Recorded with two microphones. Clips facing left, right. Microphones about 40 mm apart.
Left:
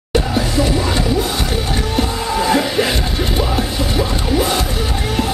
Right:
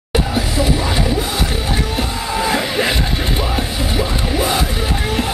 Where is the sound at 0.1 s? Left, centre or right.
Centre.